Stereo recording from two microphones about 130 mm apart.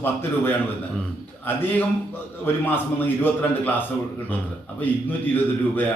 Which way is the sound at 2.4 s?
15° left (ahead or behind).